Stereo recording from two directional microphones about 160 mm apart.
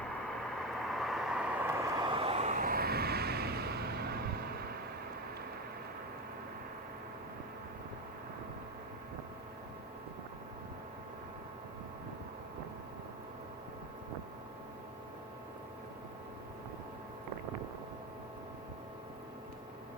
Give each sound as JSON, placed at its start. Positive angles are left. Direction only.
{"t": 0.1, "sound": "vehicle", "side_deg": 0}
{"t": 2.0, "sound": "vehicle", "side_deg": -30}
{"t": 2.6, "sound": "vehicle", "side_deg": -70}